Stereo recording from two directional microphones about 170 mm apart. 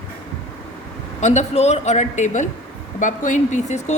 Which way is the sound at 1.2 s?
45° left (ahead or behind).